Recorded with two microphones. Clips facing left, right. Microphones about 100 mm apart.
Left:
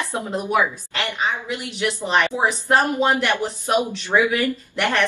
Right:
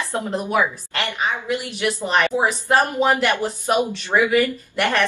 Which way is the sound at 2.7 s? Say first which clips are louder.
Even; centre (ahead or behind).